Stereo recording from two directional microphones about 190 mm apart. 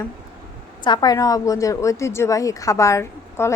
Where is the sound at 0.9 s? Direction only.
20° left (ahead or behind).